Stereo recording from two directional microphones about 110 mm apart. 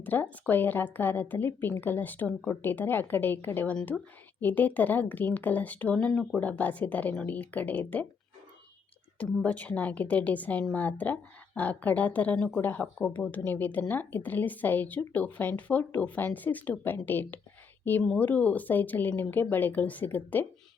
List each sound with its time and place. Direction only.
0.0 s a woman's voice: 15° left (ahead or behind)
9.4 s a woman's voice: 10° left (ahead or behind)